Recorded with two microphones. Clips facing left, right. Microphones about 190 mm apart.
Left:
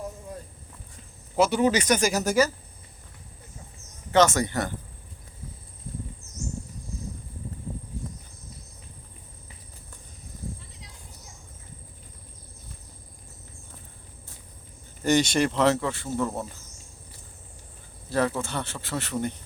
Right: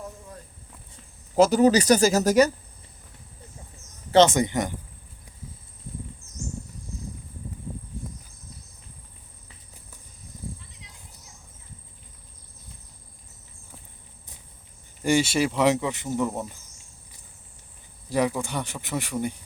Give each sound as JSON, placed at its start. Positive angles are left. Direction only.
{"t": 1.4, "sound": "speech", "side_deg": -40}
{"t": 4.3, "sound": "speech", "side_deg": -15}
{"t": 15.0, "sound": "speech", "side_deg": -10}
{"t": 18.1, "sound": "speech", "side_deg": -15}